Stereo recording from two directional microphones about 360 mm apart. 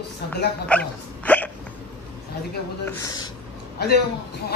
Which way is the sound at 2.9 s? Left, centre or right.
Centre.